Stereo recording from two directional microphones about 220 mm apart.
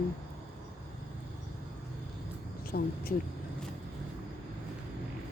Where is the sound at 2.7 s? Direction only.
40° left (ahead or behind).